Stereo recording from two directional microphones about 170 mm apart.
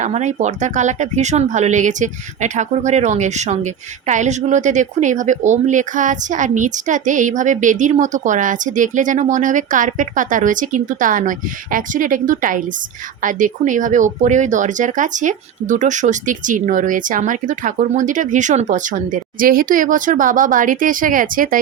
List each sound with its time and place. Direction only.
0.0 s speech: 45° right (ahead or behind)